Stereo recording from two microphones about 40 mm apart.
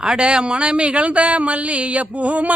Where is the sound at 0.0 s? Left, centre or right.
Right.